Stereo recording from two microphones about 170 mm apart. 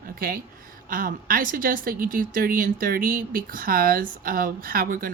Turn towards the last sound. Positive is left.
turn(degrees=-55)  # may be behind; listen again after turning